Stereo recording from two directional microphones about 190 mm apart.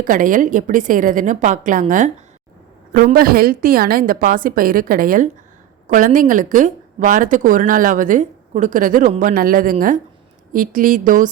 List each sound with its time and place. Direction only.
0.0 s speech: 45° right (ahead or behind)